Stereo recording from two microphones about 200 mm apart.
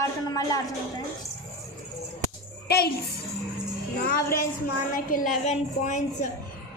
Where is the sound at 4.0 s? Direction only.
45° left (ahead or behind).